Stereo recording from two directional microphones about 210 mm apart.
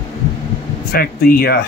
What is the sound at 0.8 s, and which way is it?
Speech, 45° left (ahead or behind).